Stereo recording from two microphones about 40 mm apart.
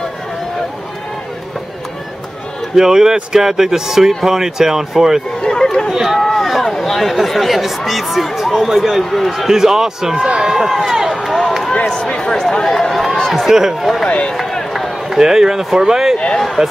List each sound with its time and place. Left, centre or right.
2.7 s speech: centre
5.4 s a sound: centre
5.9 s speech: centre
6.2 s speech: centre
9.5 s speech: centre
10.1 s speech: right
10.5 s speech: centre
11.9 s speech: left; by 13.2 s centre
13.3 s speech: centre
14.0 s speech: left
14.3 s run: centre
14.7 s run: centre
15.1 s speech: centre